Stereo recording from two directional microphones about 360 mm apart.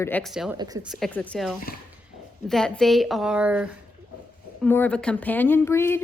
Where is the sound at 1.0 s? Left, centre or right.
Centre.